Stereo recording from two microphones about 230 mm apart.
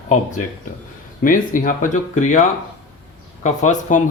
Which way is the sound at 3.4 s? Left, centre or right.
Left.